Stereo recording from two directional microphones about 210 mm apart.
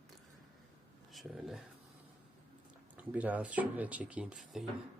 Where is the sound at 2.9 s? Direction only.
5° right (ahead or behind).